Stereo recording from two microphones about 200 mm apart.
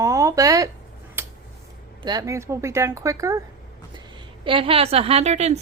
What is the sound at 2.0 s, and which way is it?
A woman's voice, 15° right (ahead or behind).